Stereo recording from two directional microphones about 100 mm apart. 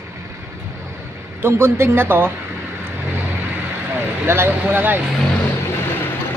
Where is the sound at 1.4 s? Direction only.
25° right (ahead or behind).